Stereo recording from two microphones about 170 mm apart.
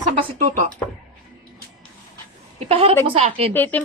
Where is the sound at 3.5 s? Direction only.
10° left (ahead or behind).